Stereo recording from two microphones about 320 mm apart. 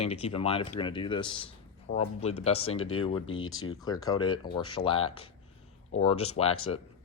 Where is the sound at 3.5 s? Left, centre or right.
Left.